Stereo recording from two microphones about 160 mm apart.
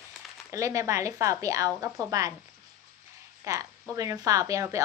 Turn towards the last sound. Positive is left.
turn(degrees=-20)  # may be behind; listen again after turning